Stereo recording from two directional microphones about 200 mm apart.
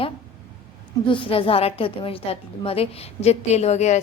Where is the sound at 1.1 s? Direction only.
25° left (ahead or behind).